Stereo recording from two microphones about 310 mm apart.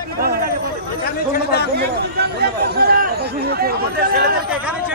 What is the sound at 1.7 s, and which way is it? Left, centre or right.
Chatter, right.